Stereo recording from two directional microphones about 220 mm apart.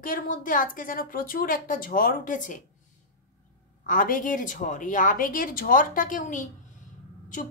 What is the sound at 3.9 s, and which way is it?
A woman's voice, 40° left (ahead or behind).